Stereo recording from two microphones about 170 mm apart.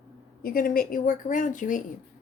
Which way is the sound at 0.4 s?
60° left (ahead or behind).